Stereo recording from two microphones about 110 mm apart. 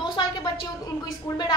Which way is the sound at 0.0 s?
40° left (ahead or behind).